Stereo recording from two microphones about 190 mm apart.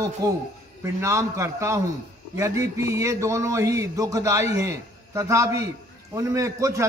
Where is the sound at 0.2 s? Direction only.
20° right (ahead or behind).